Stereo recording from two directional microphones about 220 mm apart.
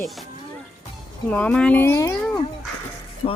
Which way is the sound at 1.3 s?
5° left (ahead or behind).